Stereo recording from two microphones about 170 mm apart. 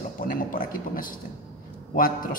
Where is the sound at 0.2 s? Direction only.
55° left (ahead or behind).